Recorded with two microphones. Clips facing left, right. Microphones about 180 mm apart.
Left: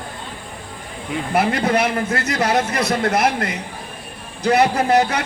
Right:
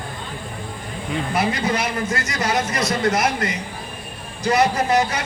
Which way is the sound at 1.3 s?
60° left (ahead or behind).